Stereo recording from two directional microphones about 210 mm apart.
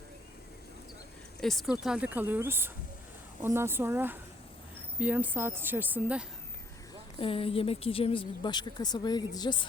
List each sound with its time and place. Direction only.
1.4 s speech: centre (ahead or behind)
7.2 s a woman's voice: 25° left (ahead or behind)